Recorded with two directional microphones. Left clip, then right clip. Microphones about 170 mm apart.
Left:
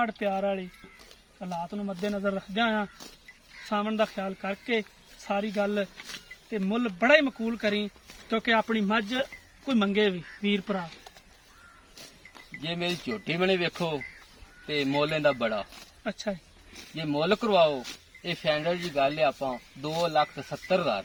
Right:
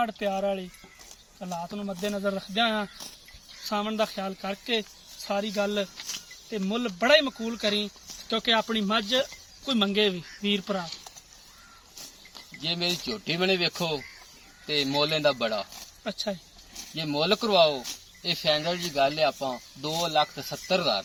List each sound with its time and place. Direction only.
0.0 s speech: 5° right (ahead or behind)
12.6 s speech: 5° left (ahead or behind)
16.0 s speech: 15° right (ahead or behind)
16.9 s speech: 10° left (ahead or behind)